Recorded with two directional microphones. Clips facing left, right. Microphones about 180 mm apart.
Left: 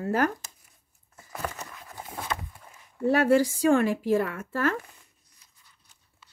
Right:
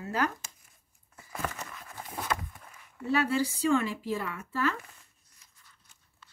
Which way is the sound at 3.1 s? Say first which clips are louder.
Left 6 dB; 50° left (ahead or behind).